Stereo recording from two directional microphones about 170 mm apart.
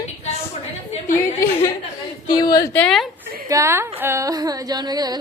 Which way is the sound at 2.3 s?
25° left (ahead or behind).